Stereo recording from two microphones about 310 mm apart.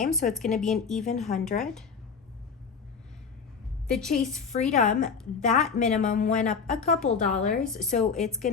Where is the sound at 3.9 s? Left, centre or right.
Centre.